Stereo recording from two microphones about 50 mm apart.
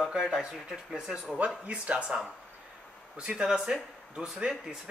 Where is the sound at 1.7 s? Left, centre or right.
Right.